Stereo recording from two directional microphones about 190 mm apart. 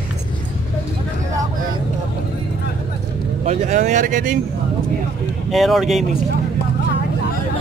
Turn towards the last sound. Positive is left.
turn(degrees=0)  # may be behind; listen again after turning